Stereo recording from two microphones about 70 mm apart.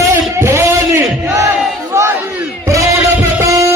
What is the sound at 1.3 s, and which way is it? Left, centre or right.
Battle cry, right.